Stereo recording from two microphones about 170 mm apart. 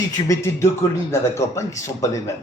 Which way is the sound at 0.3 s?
15° left (ahead or behind).